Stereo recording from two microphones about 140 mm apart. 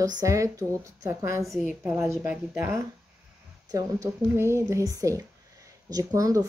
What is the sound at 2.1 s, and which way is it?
Speech, 20° right (ahead or behind).